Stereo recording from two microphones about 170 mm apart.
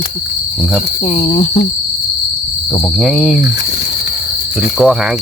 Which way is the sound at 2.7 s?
Centre (ahead or behind).